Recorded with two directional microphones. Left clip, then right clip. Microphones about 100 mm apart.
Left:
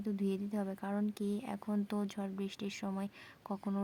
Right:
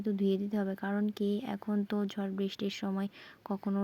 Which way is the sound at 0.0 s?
25° right (ahead or behind).